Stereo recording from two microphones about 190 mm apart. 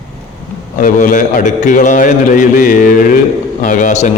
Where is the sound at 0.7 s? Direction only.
40° left (ahead or behind).